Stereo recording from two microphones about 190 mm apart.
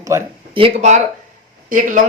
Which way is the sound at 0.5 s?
30° right (ahead or behind).